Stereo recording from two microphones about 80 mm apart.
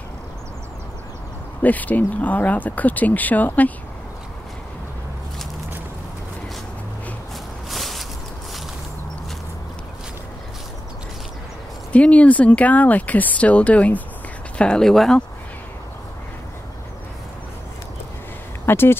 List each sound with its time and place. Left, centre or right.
1.6 s speech: left
7.7 s a sound: centre
11.9 s speech: centre
18.7 s speech: left